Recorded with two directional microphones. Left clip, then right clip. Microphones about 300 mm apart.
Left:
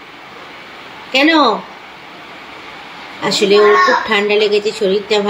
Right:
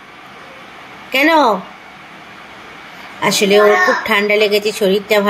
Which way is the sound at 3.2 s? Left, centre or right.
Centre.